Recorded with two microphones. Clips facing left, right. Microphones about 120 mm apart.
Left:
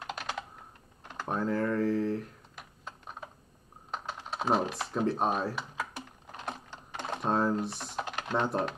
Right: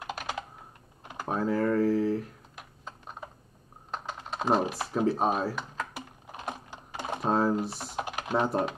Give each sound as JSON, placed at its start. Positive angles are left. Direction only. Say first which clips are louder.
{"t": 0.0, "sound": "typing", "louder": "right 2 dB", "side_deg": -5}
{"t": 1.0, "sound": "computer keyboard", "louder": "right 2 dB", "side_deg": -5}
{"t": 3.9, "sound": "typing", "louder": "right 1 dB", "side_deg": 0}